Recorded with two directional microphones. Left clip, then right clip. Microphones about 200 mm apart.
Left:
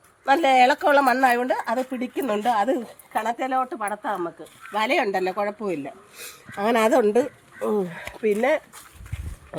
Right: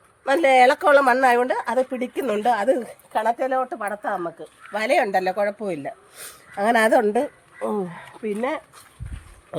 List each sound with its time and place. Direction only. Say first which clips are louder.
0.3 s speech: right 1 dB; 35° right (ahead or behind); by 8.6 s 5° right (ahead or behind)